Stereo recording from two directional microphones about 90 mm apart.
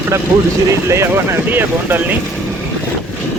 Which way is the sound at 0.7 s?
30° right (ahead or behind).